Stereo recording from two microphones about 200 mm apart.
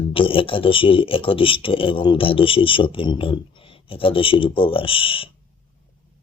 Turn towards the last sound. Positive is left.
turn(degrees=25)  # may be behind; listen again after turning